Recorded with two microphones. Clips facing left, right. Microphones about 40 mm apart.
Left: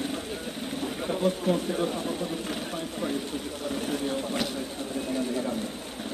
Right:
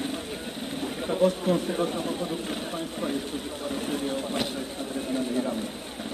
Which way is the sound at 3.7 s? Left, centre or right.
Right.